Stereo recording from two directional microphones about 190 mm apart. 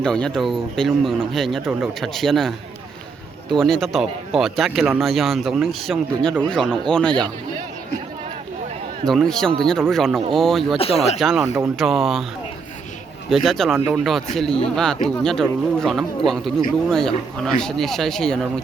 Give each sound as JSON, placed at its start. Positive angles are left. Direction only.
{"t": 0.0, "sound": "speech", "side_deg": 5}
{"t": 3.6, "sound": "speech", "side_deg": 0}
{"t": 9.0, "sound": "speech", "side_deg": 5}
{"t": 10.8, "sound": "speech", "side_deg": 30}
{"t": 11.2, "sound": "speech", "side_deg": 0}
{"t": 13.3, "sound": "speech", "side_deg": 0}